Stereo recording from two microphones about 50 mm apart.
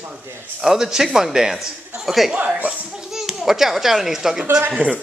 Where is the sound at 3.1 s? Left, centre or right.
Centre.